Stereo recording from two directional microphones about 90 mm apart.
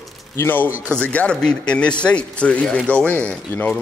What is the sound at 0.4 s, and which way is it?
Speech, 20° left (ahead or behind).